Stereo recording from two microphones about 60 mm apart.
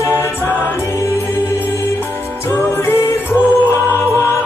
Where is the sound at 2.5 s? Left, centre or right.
Left.